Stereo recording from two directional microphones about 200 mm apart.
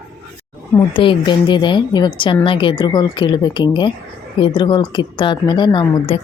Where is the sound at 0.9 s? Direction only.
25° left (ahead or behind).